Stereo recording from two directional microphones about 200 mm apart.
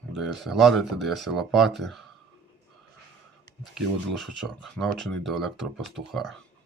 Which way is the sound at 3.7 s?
Centre (ahead or behind).